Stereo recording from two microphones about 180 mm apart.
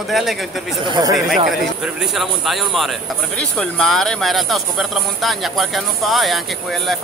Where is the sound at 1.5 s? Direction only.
Centre (ahead or behind).